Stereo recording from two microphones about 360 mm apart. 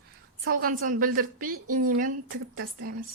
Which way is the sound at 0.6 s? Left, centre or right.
Right.